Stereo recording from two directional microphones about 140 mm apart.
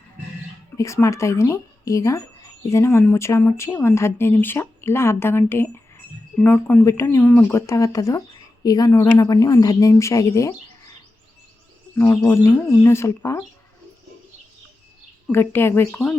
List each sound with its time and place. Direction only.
0.9 s speech: 20° left (ahead or behind)
11.9 s speech: 20° left (ahead or behind)
15.3 s speech: 15° left (ahead or behind)